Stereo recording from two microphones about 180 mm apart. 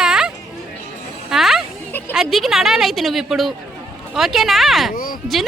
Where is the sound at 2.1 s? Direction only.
Centre (ahead or behind).